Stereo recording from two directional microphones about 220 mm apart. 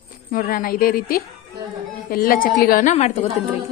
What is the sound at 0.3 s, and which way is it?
A woman's voice, 40° left (ahead or behind).